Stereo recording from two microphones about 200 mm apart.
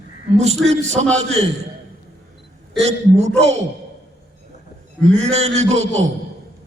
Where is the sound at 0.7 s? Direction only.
35° right (ahead or behind).